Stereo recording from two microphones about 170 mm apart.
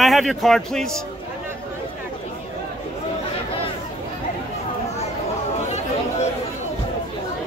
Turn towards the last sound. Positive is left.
turn(degrees=40)  # may be behind; listen again after turning